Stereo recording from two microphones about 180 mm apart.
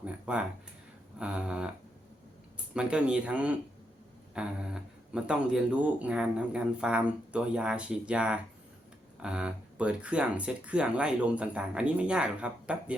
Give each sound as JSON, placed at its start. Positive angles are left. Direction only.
{"t": 0.0, "sound": "a sound", "side_deg": -5}
{"t": 1.2, "sound": "speech", "side_deg": -5}
{"t": 2.7, "sound": "speech", "side_deg": -5}